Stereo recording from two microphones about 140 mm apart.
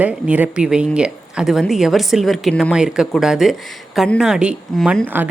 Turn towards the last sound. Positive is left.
turn(degrees=0)  # may be behind; listen again after turning